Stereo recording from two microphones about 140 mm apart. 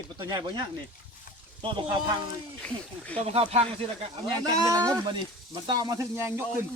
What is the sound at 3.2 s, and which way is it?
Speech, 45° right (ahead or behind).